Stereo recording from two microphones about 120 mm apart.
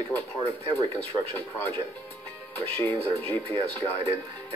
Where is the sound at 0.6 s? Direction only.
15° left (ahead or behind).